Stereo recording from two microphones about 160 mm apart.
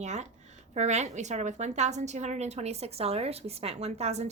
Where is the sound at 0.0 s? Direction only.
45° right (ahead or behind).